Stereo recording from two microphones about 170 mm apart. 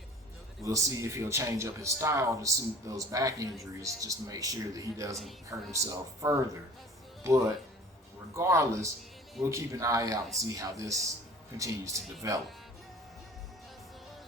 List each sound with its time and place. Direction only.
0.6 s speech: 20° right (ahead or behind)